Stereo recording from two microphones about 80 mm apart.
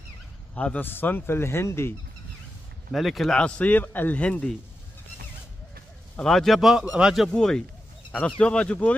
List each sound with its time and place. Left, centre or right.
0.6 s a man's voice: centre
0.8 s speech: left
2.9 s speech: centre
3.3 s a man's voice: centre
6.2 s speech: centre
7.2 s a man's voice: centre